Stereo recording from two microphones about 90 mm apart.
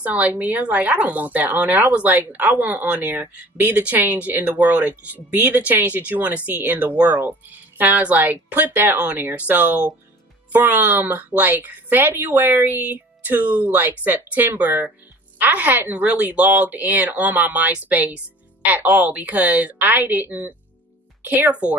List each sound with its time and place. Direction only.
0.0 s speech: 15° right (ahead or behind)